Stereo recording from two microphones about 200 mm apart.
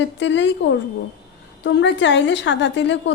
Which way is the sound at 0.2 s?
65° left (ahead or behind).